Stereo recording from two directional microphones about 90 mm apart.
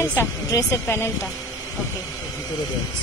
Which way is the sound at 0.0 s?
30° left (ahead or behind).